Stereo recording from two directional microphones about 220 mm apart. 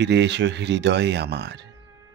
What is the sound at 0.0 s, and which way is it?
Speech, 50° right (ahead or behind).